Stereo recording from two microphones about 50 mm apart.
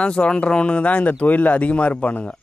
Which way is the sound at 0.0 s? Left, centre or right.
Left.